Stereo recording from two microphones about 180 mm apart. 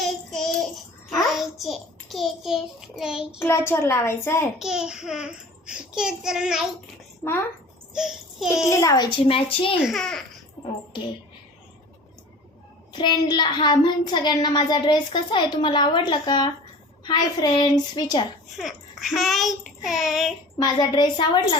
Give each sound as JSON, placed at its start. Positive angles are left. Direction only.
{"t": 0.0, "sound": "child singing", "side_deg": 0}
{"t": 2.4, "sound": "a child's voice", "side_deg": -5}
{"t": 3.3, "sound": "a woman's voice", "side_deg": 15}
{"t": 4.6, "sound": "a child's voice", "side_deg": -5}
{"t": 7.2, "sound": "a woman's voice", "side_deg": 15}
{"t": 7.9, "sound": "a sound", "side_deg": 0}
{"t": 8.6, "sound": "a woman's voice", "side_deg": 15}
{"t": 9.8, "sound": "a child's voice", "side_deg": 0}
{"t": 10.9, "sound": "a woman's voice", "side_deg": 30}
{"t": 12.9, "sound": "a woman's voice", "side_deg": 25}
{"t": 18.5, "sound": "a child's voice", "side_deg": 0}
{"t": 20.7, "sound": "a woman's voice", "side_deg": 25}